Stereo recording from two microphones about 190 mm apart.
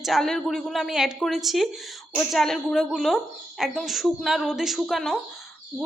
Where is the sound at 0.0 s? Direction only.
Centre (ahead or behind).